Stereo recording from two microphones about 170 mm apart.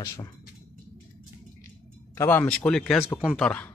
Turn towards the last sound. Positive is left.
turn(degrees=10)  # may be behind; listen again after turning